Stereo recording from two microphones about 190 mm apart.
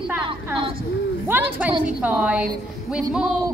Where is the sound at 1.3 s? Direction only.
10° right (ahead or behind).